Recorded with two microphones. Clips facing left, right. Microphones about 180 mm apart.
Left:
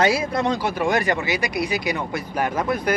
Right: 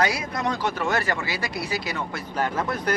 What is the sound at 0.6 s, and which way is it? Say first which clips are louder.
Speech: left 4 dB; 15° left (ahead or behind).